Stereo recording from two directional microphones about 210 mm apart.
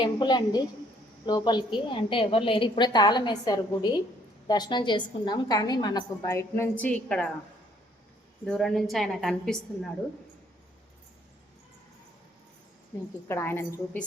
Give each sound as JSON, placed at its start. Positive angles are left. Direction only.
{"t": 0.0, "sound": "a woman's voice", "side_deg": 20}
{"t": 8.4, "sound": "a woman's voice", "side_deg": 0}
{"t": 13.2, "sound": "a woman's voice", "side_deg": 10}